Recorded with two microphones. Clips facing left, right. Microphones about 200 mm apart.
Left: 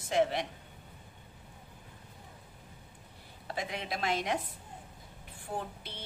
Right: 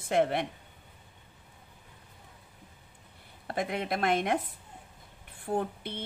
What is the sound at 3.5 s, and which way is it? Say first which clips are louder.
Speech: right 6 dB; 55° right (ahead or behind).